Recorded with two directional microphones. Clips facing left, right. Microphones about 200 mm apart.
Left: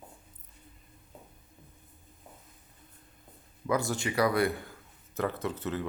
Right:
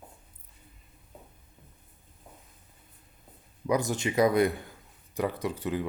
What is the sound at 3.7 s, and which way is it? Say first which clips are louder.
Speech: right 2 dB; 20° right (ahead or behind).